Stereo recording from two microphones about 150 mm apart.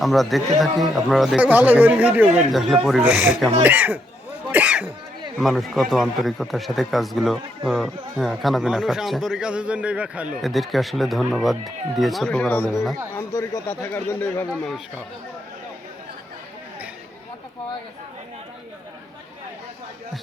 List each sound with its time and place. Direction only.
0.0 s a man's voice: centre (ahead or behind)
3.0 s speech: 15° right (ahead or behind)
4.5 s throat clearing: 10° right (ahead or behind)
5.4 s a man's voice: centre (ahead or behind)
12.6 s a man's voice: centre (ahead or behind)
13.1 s speech: 20° left (ahead or behind)